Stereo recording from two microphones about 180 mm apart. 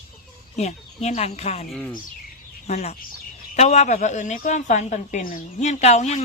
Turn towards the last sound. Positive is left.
turn(degrees=40)  # may be behind; listen again after turning